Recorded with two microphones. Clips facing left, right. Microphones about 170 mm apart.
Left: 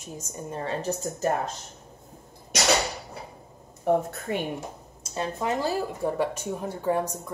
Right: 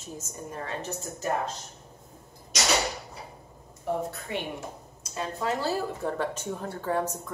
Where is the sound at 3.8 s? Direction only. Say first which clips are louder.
Left 6 dB; 50° left (ahead or behind).